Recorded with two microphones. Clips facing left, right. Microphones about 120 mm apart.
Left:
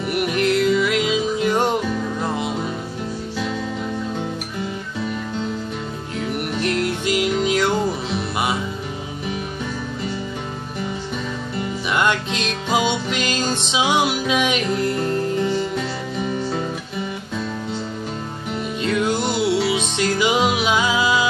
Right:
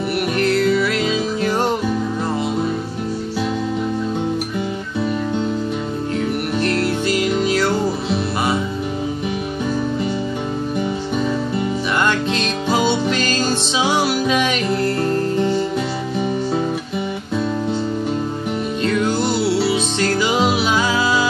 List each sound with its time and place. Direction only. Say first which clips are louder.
0.1 s music: even; 15° left (ahead or behind)
7.1 s music: left 1 dB; 15° left (ahead or behind)
12.7 s music: right 2 dB; 15° left (ahead or behind)
18.8 s music: right 1 dB; 10° left (ahead or behind)